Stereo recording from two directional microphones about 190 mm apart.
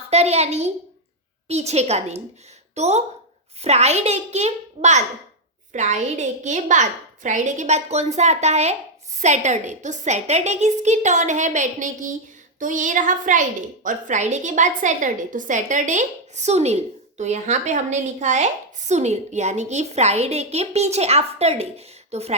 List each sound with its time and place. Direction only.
0.1 s a woman's voice: 35° right (ahead or behind)